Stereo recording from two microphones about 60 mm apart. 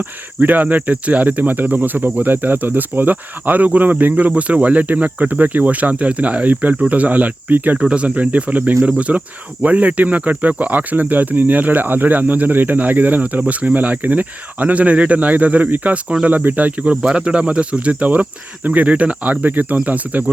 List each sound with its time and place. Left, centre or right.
0.3 s speech: right
7.8 s speech: centre
16.9 s speech: centre